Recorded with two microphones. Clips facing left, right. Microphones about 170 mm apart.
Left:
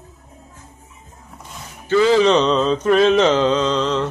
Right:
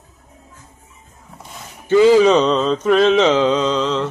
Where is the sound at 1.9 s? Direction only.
15° right (ahead or behind).